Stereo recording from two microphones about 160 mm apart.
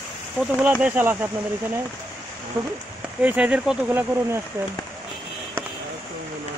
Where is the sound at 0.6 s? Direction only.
10° right (ahead or behind).